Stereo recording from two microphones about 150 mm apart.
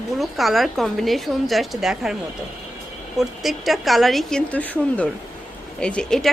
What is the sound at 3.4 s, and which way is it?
Speech, centre (ahead or behind).